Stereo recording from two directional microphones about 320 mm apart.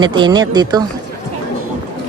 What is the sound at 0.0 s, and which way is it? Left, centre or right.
Speech, centre.